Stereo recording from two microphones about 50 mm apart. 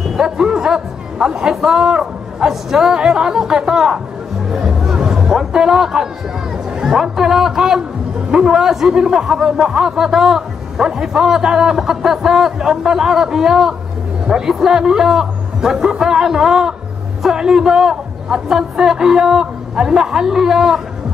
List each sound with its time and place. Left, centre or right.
0.1 s a man's voice: centre
4.5 s music: centre
5.3 s a man's voice: centre